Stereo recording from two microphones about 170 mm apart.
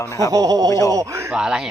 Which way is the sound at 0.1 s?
15° left (ahead or behind).